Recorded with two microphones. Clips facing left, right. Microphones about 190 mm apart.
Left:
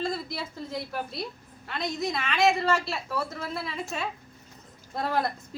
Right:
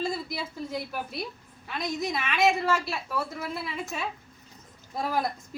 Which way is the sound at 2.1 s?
Centre (ahead or behind).